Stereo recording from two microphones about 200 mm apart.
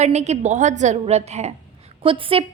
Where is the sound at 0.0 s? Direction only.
35° right (ahead or behind).